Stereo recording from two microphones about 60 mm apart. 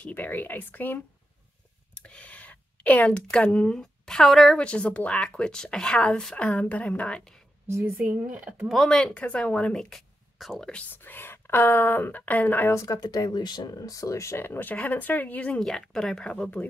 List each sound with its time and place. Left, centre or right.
0.0 s speech: left
2.0 s a sound: left
3.5 s speech: centre
4.6 s speech: centre
7.6 s a woman's voice: right
8.3 s speech: centre
8.6 s speech: centre
9.0 s speech: centre
10.8 s speech: left
12.7 s speech: left
14.4 s speech: left
15.6 s speech: centre